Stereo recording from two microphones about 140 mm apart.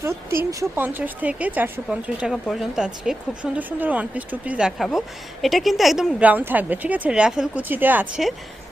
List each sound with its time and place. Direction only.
0.0 s speech: 20° right (ahead or behind)